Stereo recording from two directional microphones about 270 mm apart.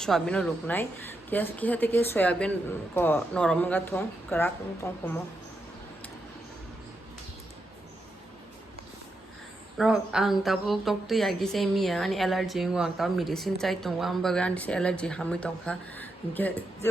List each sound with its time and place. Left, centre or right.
0.0 s a woman's voice: centre
9.7 s a woman's voice: centre